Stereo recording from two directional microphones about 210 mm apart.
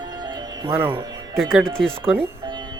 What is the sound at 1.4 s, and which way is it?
Speech, centre (ahead or behind).